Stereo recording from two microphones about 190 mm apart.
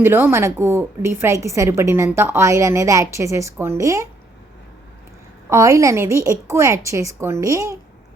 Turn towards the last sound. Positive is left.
turn(degrees=-15)  # may be behind; listen again after turning